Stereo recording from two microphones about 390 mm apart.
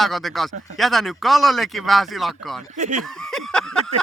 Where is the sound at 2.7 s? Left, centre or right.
Centre.